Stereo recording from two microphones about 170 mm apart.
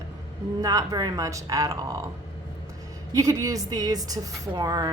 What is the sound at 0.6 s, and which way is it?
Speech, 20° right (ahead or behind).